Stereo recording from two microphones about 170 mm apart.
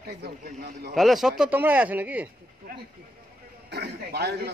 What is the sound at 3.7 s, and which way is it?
Speech, 70° right (ahead or behind).